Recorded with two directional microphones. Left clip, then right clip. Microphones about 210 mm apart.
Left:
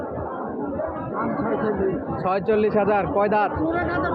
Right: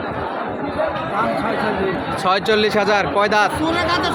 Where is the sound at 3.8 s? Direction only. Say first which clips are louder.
Right 8 dB; 65° right (ahead or behind).